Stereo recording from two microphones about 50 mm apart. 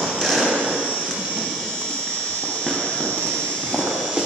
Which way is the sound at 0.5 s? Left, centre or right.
Right.